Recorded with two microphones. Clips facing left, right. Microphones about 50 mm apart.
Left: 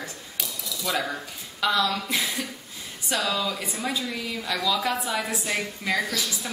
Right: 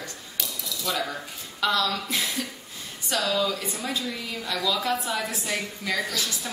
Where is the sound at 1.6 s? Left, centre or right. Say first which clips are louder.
Left 1 dB; centre.